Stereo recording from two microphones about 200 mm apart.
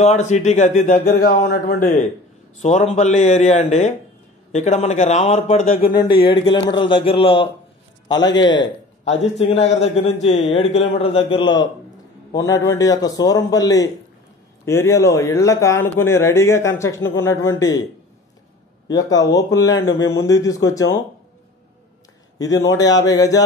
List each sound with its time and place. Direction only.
0.0 s a man's voice: 35° left (ahead or behind)
9.4 s a man's voice: 30° left (ahead or behind); by 17.8 s 15° left (ahead or behind)
18.9 s a man's voice: 20° left (ahead or behind)
22.4 s a man's voice: 15° left (ahead or behind)